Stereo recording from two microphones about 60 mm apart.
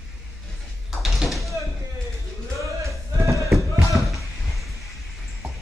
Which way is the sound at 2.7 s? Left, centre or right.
Right.